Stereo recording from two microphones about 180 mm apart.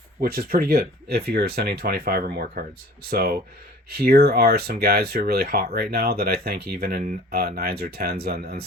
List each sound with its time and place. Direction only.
0.2 s speech: 55° right (ahead or behind)